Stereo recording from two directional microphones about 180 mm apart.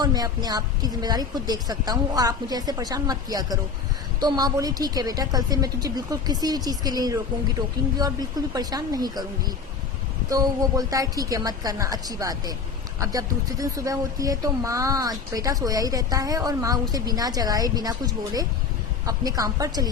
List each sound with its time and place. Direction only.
0.0 s speech: 20° right (ahead or behind)